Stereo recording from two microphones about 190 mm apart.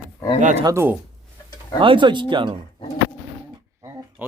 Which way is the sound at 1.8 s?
25° right (ahead or behind).